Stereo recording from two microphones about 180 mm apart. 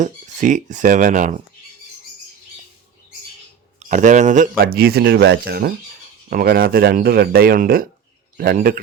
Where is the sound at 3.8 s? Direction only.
45° right (ahead or behind).